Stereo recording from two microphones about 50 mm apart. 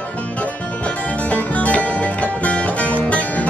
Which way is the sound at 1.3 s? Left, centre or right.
Left.